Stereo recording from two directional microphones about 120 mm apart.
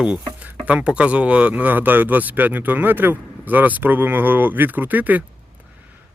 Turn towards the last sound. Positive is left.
turn(degrees=-15)  # may be behind; listen again after turning